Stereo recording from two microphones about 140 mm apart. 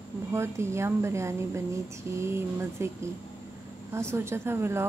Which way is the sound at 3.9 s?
20° right (ahead or behind).